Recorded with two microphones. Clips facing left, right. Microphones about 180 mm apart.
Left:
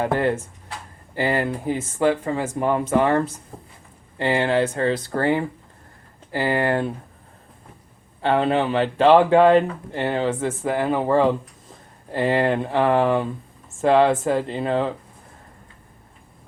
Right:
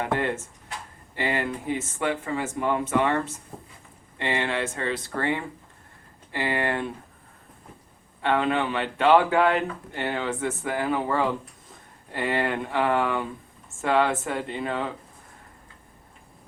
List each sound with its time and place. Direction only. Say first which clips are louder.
0.0 s speech: left 5 dB; 35° left (ahead or behind)
8.2 s speech: left 4 dB; 35° left (ahead or behind)